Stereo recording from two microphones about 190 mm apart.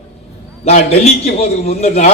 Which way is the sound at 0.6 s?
35° left (ahead or behind).